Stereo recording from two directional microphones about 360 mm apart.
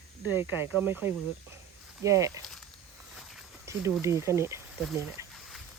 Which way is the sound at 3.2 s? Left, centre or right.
Centre.